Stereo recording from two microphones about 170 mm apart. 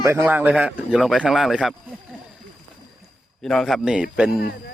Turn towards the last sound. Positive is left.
turn(degrees=-5)  # may be behind; listen again after turning